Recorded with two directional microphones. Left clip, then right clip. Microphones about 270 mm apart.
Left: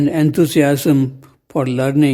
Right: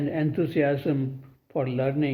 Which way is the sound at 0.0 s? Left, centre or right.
Left.